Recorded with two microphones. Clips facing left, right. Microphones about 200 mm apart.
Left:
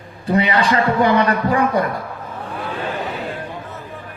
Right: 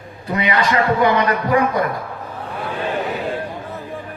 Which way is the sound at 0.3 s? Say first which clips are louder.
Left 2 dB; 30° left (ahead or behind).